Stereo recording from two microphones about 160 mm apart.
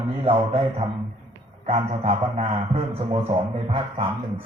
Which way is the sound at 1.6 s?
40° right (ahead or behind).